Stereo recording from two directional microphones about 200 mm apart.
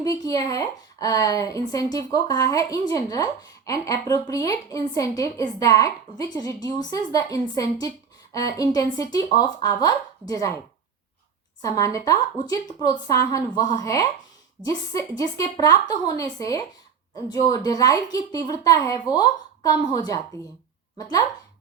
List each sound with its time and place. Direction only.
0.0 s a woman's voice: 15° left (ahead or behind)
11.6 s a woman's voice: 15° left (ahead or behind)